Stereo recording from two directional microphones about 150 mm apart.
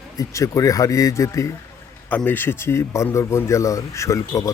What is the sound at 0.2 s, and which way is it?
A man's voice, 20° left (ahead or behind).